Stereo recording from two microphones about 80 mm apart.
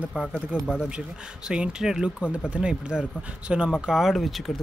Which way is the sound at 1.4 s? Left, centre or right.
Centre.